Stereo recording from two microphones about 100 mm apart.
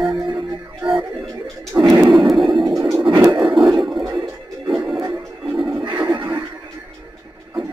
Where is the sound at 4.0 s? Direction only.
45° right (ahead or behind).